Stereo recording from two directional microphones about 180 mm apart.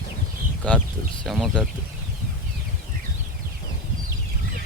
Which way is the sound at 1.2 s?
Centre (ahead or behind).